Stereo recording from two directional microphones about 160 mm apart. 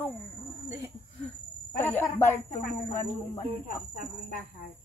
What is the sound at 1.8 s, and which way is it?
Speech, 10° left (ahead or behind).